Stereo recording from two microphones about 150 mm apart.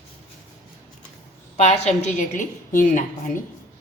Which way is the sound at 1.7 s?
50° left (ahead or behind).